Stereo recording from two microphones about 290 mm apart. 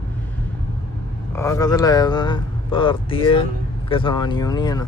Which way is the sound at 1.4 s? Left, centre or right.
Centre.